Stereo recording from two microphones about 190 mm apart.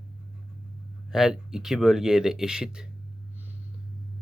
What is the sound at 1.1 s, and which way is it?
Speech, centre (ahead or behind).